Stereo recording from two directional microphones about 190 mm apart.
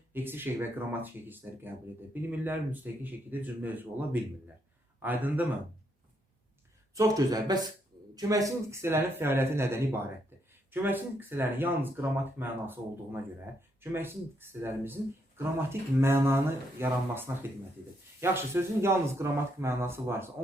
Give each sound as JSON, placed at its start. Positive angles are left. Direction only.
{"t": 0.1, "sound": "speech", "side_deg": -10}
{"t": 6.9, "sound": "speech", "side_deg": -20}
{"t": 13.9, "sound": "speech", "side_deg": -10}